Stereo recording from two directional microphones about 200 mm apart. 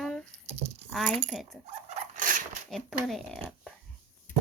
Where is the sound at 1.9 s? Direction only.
40° right (ahead or behind).